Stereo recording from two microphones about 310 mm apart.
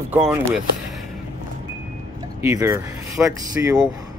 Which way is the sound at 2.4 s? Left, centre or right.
Centre.